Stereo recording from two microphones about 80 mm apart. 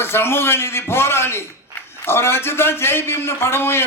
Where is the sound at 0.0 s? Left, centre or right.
Left.